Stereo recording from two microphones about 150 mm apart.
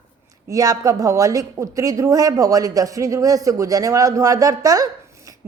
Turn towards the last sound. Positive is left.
turn(degrees=-25)  # may be behind; listen again after turning